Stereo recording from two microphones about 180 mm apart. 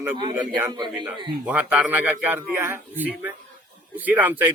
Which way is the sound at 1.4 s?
5° right (ahead or behind).